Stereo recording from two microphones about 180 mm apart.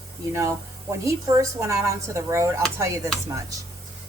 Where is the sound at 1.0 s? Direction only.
15° right (ahead or behind).